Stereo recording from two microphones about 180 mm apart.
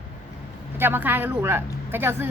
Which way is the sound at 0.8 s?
10° right (ahead or behind).